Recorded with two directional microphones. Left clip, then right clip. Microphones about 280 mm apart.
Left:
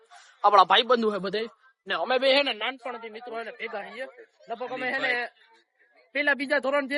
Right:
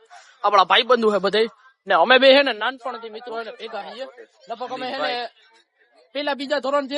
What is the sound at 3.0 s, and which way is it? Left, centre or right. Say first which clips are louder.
Speech: right 5 dB; right.